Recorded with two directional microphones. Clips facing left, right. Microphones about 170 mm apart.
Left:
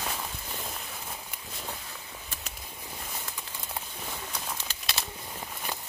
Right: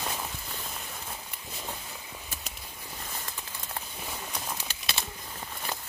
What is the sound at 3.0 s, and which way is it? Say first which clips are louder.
Bird: right 2 dB; 10° left (ahead or behind).